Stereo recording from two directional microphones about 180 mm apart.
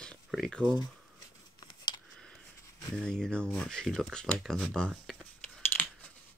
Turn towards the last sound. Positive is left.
turn(degrees=5)  # may be behind; listen again after turning